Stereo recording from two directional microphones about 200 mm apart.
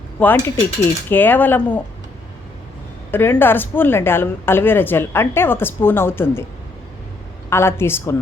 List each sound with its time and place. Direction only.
0.2 s a woman's voice: 10° left (ahead or behind)
3.1 s a woman's voice: 10° left (ahead or behind)
7.5 s a woman's voice: 10° left (ahead or behind)